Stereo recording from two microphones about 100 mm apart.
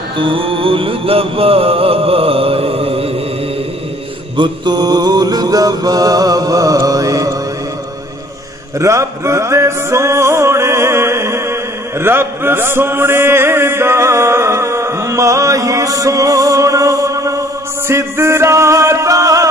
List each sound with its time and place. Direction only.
0.2 s music: 60° right (ahead or behind)
4.4 s mantra: 45° right (ahead or behind)
8.7 s music: 30° right (ahead or behind)
12.0 s mantra: 25° right (ahead or behind)